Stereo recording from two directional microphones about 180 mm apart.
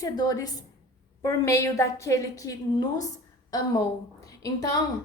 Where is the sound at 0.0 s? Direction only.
20° left (ahead or behind).